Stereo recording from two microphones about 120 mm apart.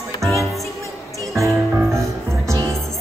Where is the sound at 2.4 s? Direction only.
25° right (ahead or behind).